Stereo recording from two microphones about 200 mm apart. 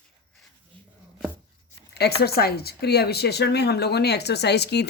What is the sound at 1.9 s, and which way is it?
A woman's voice, 55° left (ahead or behind).